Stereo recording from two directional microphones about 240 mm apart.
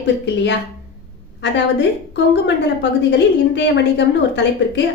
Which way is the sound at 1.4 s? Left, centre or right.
Left.